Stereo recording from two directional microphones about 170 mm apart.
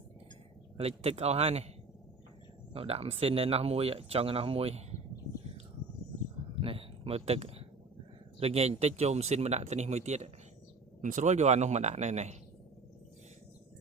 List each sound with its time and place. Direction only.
0.8 s speech: 35° right (ahead or behind)
2.7 s speech: 35° right (ahead or behind)
6.6 s a sound: 35° right (ahead or behind)
8.4 s speech: 40° right (ahead or behind)